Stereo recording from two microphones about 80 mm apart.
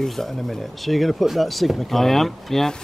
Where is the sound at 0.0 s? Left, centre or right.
Centre.